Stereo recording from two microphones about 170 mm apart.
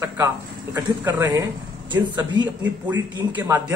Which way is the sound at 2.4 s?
10° right (ahead or behind).